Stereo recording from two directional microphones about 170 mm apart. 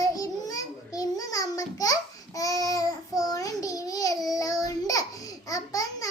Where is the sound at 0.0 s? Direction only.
20° left (ahead or behind).